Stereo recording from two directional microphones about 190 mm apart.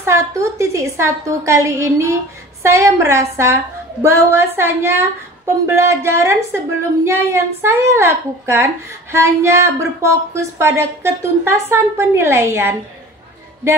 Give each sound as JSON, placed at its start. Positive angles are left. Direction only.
{"t": 0.0, "sound": "a woman's voice", "side_deg": -15}